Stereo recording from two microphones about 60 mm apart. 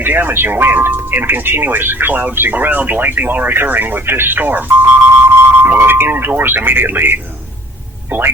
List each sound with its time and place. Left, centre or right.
0.0 s speech: right